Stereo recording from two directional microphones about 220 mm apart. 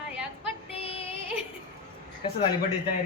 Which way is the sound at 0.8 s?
25° left (ahead or behind).